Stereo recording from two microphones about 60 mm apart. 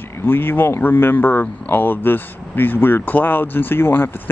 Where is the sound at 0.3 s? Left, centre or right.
Left.